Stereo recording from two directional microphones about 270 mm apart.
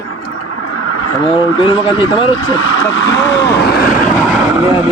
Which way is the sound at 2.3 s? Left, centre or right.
Left.